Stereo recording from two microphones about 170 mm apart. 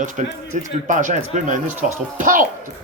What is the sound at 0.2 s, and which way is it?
Speech, 45° right (ahead or behind).